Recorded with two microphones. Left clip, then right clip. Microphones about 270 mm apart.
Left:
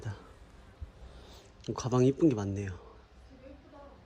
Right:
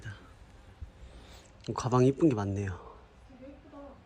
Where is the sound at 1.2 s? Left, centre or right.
Centre.